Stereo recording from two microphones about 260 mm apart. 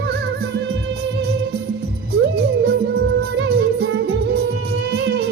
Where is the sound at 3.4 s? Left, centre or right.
Right.